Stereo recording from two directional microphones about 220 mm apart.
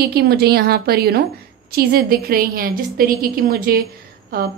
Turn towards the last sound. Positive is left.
turn(degrees=-45)  # may be behind; listen again after turning